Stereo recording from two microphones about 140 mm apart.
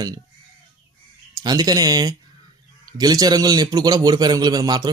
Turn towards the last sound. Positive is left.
turn(degrees=-30)  # may be behind; listen again after turning